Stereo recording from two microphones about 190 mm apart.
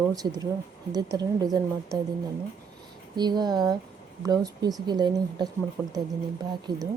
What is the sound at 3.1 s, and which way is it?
Speech, 20° right (ahead or behind).